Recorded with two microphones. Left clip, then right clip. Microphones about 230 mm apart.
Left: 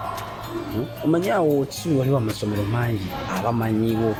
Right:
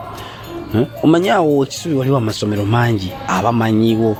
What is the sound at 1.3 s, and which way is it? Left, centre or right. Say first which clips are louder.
Speech: right 6 dB; right.